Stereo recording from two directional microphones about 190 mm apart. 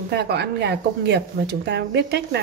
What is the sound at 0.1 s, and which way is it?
Speech, 60° right (ahead or behind).